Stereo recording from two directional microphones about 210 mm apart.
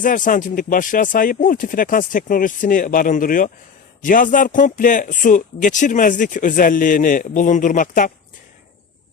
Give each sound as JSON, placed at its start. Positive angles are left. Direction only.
{"t": 0.0, "sound": "speech", "side_deg": 40}